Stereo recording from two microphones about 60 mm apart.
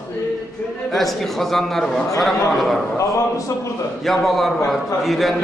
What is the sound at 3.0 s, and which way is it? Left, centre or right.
Speech, left.